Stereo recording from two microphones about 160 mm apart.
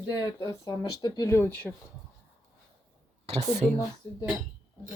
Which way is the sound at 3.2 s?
45° right (ahead or behind).